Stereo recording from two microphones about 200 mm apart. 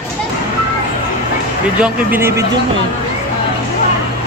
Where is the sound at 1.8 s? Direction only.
10° right (ahead or behind).